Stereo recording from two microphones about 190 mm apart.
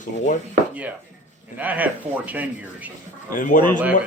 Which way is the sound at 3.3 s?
45° left (ahead or behind).